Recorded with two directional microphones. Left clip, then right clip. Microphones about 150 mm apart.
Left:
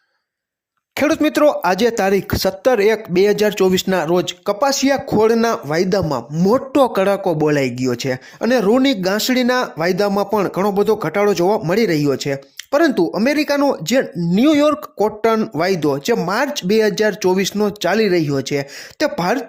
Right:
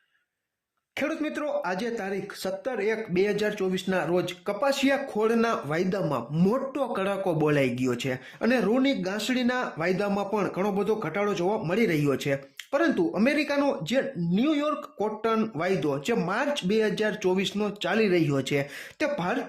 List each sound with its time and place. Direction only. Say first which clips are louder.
0.9 s speech: left 14 dB; 65° left (ahead or behind)
7.3 s speech: left 8 dB; 30° left (ahead or behind)
12.7 s speech: left 10 dB; 55° left (ahead or behind); by 18.6 s 35° left (ahead or behind)
18.9 s speech: left 10 dB; 50° left (ahead or behind)